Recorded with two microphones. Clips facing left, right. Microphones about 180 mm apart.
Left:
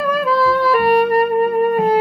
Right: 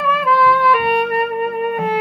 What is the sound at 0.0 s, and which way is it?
Music, 35° left (ahead or behind).